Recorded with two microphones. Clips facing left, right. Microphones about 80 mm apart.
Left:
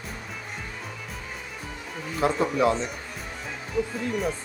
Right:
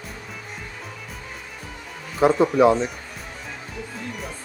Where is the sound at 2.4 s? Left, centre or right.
Right.